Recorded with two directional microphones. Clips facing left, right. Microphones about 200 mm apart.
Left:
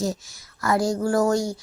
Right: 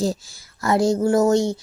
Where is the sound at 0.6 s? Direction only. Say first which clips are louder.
Right 4 dB; 25° right (ahead or behind).